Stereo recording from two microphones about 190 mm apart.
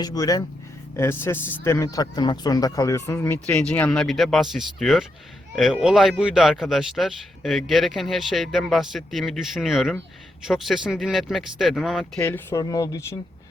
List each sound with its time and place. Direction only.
0.0 s speech: 20° left (ahead or behind); by 12.2 s centre (ahead or behind)
12.2 s speech: 15° left (ahead or behind)